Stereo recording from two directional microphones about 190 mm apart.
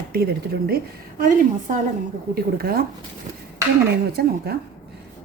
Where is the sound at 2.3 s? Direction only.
55° right (ahead or behind).